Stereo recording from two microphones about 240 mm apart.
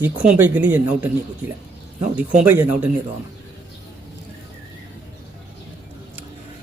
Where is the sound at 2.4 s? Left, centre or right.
Centre.